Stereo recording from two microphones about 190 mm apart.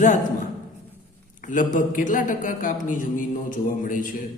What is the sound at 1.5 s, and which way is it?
Speech, 40° left (ahead or behind).